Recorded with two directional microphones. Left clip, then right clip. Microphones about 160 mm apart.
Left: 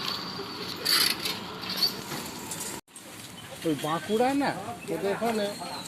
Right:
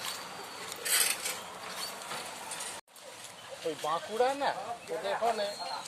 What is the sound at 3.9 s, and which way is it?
Speech, 45° left (ahead or behind).